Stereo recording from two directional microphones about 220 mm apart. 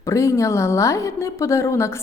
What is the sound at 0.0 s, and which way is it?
A woman's voice, 15° left (ahead or behind).